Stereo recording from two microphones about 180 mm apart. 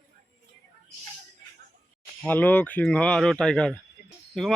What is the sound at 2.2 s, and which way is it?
Speech, 10° left (ahead or behind).